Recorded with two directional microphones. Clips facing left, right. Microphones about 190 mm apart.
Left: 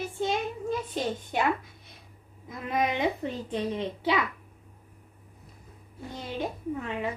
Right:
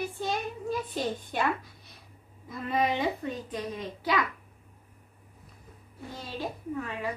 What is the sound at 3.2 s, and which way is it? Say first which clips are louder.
Speech: left 3 dB; 30° left (ahead or behind).